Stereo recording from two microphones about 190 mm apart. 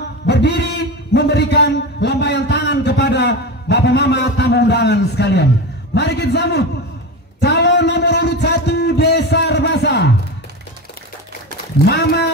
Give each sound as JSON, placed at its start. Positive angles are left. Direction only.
{"t": 0.3, "sound": "a man's voice", "side_deg": 65}
{"t": 7.4, "sound": "a sound", "side_deg": 65}
{"t": 11.8, "sound": "a man's voice", "side_deg": 60}